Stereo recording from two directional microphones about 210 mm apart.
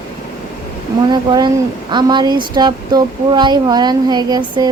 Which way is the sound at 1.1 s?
20° right (ahead or behind).